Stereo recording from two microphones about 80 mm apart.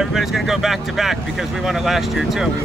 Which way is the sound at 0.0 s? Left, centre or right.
Centre.